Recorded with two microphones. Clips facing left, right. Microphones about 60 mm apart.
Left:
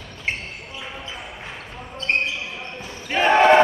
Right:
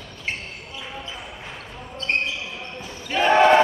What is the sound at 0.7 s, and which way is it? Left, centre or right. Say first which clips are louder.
Basketball bounce: even; left.